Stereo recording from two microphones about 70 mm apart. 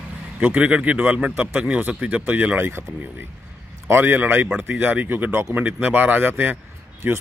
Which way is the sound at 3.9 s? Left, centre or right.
Right.